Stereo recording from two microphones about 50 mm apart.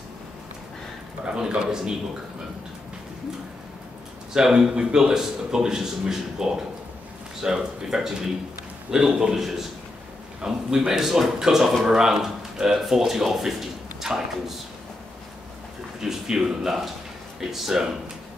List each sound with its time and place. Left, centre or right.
1.2 s speech: centre
4.3 s speech: centre
16.0 s speech: centre